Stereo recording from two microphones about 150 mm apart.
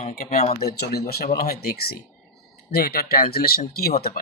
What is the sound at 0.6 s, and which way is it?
Speech, 90° left.